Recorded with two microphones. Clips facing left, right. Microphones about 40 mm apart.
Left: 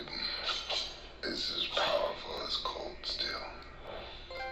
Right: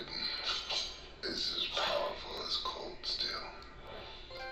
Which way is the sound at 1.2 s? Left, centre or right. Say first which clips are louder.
Left 2 dB; left.